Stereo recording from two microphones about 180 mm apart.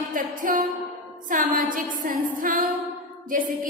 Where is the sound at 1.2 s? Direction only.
50° right (ahead or behind).